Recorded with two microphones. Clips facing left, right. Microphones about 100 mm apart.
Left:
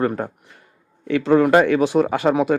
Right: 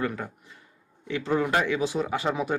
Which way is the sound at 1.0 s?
70° left (ahead or behind).